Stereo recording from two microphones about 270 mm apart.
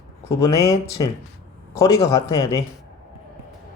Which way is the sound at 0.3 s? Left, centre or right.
Centre.